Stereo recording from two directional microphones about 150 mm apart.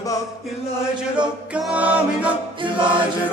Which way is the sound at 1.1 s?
10° right (ahead or behind).